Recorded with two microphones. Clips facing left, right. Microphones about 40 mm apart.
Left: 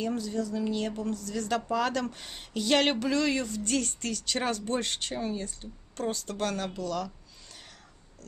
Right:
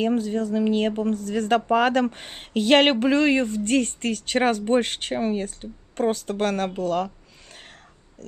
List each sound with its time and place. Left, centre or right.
0.0 s speech: right